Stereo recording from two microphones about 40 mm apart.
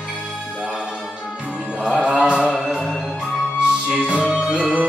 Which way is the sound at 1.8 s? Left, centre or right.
Right.